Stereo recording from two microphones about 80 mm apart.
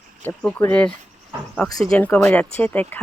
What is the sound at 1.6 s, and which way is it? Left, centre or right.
Speech, centre.